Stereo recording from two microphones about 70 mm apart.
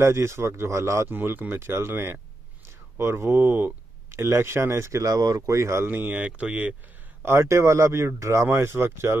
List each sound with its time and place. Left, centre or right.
0.0 s speech: right
1.0 s speech: right
5.1 s speech: right
5.5 s speech: right
5.9 s speech: right
7.2 s speech: right